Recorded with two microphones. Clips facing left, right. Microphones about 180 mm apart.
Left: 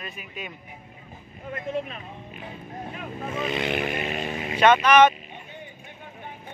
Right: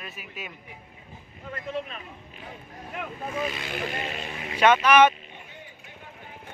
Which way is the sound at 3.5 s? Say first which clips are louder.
Left 6 dB; 20° left (ahead or behind).